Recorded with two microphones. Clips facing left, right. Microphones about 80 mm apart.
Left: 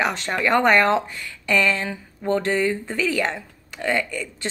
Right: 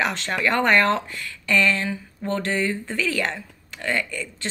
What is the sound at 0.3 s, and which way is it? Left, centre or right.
A woman's voice, left.